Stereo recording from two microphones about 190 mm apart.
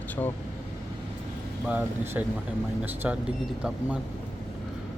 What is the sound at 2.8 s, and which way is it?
Speech, 10° right (ahead or behind).